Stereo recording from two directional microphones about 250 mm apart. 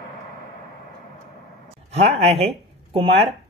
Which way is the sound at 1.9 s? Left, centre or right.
Right.